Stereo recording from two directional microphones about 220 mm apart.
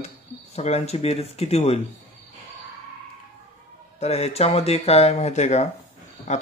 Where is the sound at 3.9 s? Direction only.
30° left (ahead or behind).